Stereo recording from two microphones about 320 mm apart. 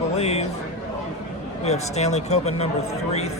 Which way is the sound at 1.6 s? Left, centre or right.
Centre.